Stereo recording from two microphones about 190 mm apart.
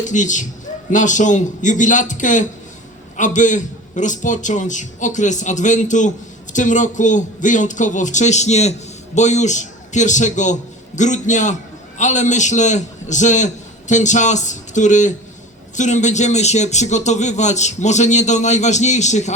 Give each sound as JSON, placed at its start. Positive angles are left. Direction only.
{"t": 0.0, "sound": "a man's voice", "side_deg": 40}